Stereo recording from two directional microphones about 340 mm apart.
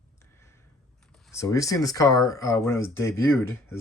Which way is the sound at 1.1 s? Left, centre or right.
Centre.